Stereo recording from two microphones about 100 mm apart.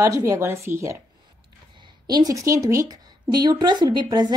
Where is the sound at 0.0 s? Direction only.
30° right (ahead or behind).